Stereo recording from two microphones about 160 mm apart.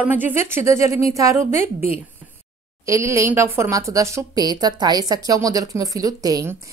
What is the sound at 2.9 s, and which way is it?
A woman's voice, 20° right (ahead or behind).